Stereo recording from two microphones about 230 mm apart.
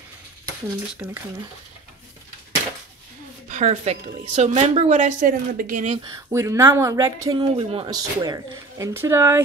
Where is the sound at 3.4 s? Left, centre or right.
Right.